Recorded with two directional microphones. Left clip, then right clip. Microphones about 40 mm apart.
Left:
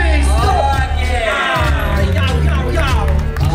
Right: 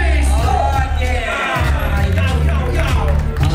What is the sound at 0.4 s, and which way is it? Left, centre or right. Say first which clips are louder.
Music: left 2 dB; left.